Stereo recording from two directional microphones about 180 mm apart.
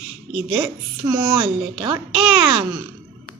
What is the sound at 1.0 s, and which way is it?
A child's voice, 30° right (ahead or behind).